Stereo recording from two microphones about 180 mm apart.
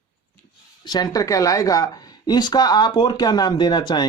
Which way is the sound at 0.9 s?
20° left (ahead or behind).